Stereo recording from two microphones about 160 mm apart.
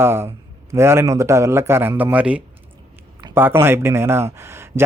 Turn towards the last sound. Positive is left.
turn(degrees=-15)  # may be behind; listen again after turning